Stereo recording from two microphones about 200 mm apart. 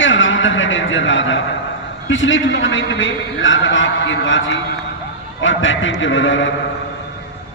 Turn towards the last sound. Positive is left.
turn(degrees=70)  # may be behind; listen again after turning